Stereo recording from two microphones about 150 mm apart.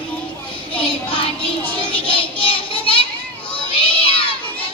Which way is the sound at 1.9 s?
35° left (ahead or behind).